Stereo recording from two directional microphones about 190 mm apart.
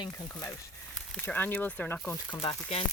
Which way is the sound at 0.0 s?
15° left (ahead or behind).